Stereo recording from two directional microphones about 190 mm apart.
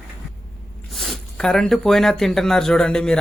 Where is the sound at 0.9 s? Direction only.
Centre (ahead or behind).